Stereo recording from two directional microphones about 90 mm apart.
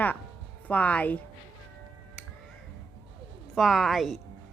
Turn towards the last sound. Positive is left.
turn(degrees=0)  # may be behind; listen again after turning